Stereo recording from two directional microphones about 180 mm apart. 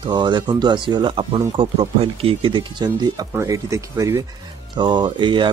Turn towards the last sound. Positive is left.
turn(degrees=-25)  # may be behind; listen again after turning